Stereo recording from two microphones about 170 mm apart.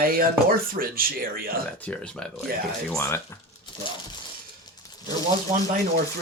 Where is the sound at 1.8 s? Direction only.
5° left (ahead or behind).